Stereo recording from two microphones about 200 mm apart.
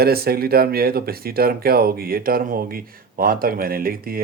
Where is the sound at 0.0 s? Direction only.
50° right (ahead or behind).